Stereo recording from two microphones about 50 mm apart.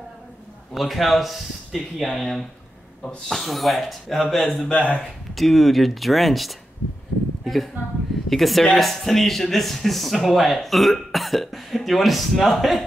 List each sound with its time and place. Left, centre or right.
0.7 s a man's voice: centre; by 5.0 s left
5.3 s a man's voice: centre